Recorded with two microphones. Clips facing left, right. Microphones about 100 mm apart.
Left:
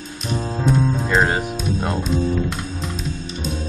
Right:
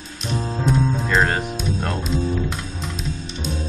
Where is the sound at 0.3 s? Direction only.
Centre (ahead or behind).